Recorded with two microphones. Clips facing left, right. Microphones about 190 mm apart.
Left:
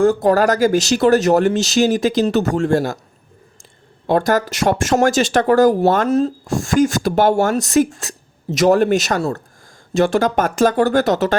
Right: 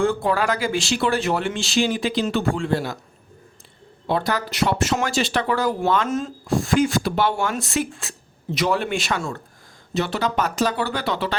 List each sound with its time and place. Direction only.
0.0 s speech: 40° left (ahead or behind)
4.0 s speech: 45° left (ahead or behind)